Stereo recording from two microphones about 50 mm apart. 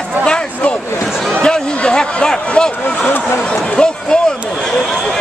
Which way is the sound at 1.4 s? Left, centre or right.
Centre.